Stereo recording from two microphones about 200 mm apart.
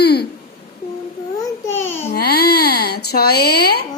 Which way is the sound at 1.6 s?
10° left (ahead or behind).